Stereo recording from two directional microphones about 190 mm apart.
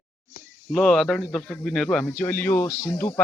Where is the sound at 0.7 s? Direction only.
5° left (ahead or behind).